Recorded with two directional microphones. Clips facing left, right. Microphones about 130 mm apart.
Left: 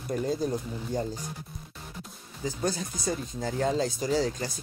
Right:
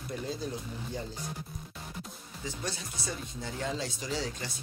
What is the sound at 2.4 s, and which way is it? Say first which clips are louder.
Speech: left 8 dB; 40° left (ahead or behind).